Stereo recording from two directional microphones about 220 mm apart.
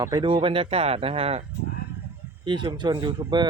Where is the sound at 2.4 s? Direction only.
20° right (ahead or behind).